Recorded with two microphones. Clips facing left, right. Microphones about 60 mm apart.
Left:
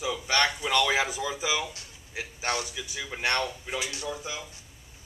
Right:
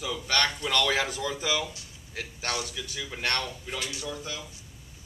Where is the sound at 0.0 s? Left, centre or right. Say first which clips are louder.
Left 2 dB; centre.